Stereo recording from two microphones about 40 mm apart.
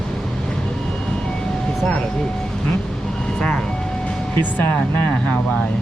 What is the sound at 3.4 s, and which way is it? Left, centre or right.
Vehicle, left.